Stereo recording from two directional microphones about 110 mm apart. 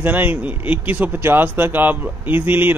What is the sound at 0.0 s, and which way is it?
Speech, 15° right (ahead or behind).